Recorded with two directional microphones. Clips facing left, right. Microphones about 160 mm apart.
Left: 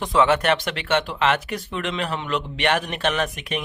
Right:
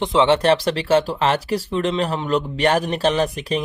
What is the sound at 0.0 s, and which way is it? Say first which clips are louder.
Speech: right 3 dB; 25° right (ahead or behind).